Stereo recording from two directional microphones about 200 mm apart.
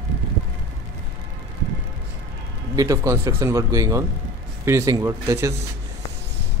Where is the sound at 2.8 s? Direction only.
15° right (ahead or behind).